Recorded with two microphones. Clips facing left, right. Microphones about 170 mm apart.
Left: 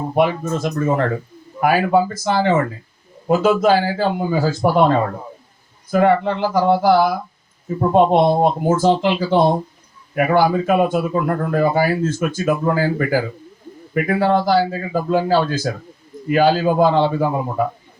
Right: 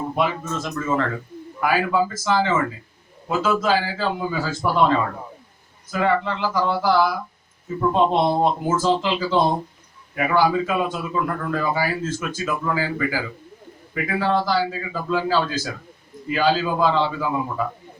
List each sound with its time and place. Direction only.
0.1 s a man's voice: 55° left (ahead or behind)
10.2 s a man's voice: 55° left (ahead or behind)